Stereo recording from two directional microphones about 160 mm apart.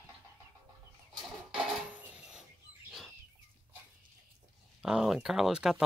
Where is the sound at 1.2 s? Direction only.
5° right (ahead or behind).